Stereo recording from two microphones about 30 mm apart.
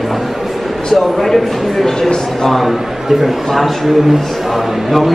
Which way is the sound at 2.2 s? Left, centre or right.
Centre.